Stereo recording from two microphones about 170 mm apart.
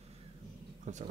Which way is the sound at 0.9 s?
45° right (ahead or behind).